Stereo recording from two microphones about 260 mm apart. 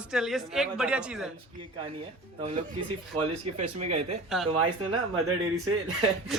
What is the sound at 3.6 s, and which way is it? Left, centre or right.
Speech, right.